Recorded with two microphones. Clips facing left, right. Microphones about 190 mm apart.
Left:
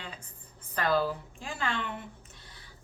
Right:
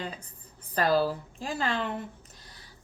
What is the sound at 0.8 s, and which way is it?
A woman's voice, 35° right (ahead or behind).